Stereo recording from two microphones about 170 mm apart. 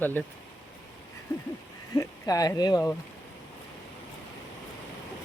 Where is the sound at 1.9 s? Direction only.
20° left (ahead or behind).